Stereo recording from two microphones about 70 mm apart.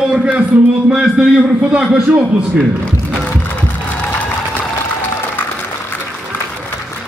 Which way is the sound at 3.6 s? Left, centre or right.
Left.